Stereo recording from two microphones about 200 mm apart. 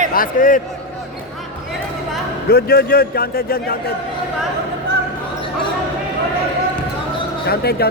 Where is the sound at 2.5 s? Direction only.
50° left (ahead or behind).